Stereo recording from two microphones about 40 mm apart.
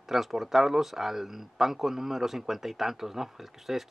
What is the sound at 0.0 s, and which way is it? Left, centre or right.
A man's voice, centre.